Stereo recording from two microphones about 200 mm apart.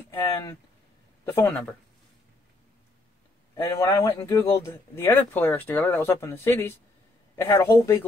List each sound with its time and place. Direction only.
0.1 s speech: 15° left (ahead or behind)
3.5 s speech: 10° left (ahead or behind)